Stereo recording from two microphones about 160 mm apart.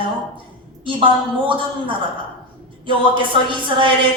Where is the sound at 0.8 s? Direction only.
30° right (ahead or behind).